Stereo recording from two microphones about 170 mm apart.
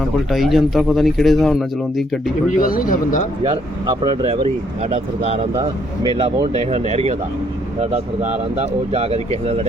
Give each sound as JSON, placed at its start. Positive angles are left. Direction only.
{"t": 0.3, "sound": "speech", "side_deg": 0}
{"t": 2.6, "sound": "speech", "side_deg": 55}
{"t": 3.8, "sound": "speech", "side_deg": -25}
{"t": 6.1, "sound": "speech", "side_deg": -30}
{"t": 6.7, "sound": "speech", "side_deg": -40}